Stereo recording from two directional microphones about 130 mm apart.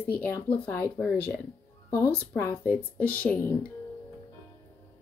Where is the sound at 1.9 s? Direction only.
15° left (ahead or behind).